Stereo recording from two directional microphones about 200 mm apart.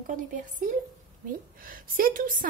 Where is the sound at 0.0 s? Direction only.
40° right (ahead or behind).